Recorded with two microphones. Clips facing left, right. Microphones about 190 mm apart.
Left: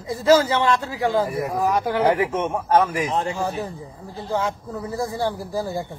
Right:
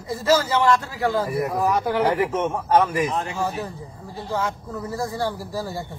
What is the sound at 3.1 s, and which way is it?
Speech, 30° left (ahead or behind).